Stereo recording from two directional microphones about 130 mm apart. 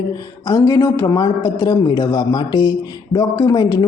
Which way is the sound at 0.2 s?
25° left (ahead or behind).